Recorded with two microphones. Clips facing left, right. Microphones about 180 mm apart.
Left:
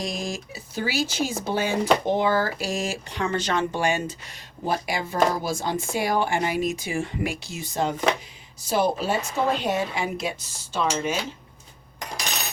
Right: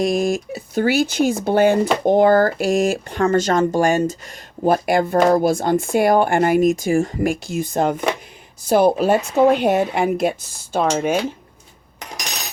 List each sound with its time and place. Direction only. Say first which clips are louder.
0.0 s speech: right 12 dB; 60° right (ahead or behind)